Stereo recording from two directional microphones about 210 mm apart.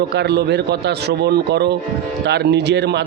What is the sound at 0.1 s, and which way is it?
A man's voice, 50° right (ahead or behind).